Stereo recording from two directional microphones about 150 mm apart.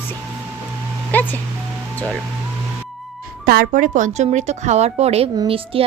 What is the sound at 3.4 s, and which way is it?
A woman's voice, 75° right (ahead or behind).